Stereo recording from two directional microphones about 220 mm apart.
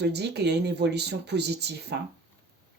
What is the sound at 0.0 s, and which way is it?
Speech, 50° right (ahead or behind).